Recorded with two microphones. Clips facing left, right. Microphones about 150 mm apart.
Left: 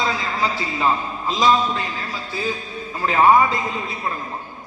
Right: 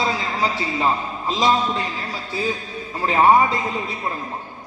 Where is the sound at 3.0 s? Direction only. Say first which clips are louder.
Even; 25° right (ahead or behind).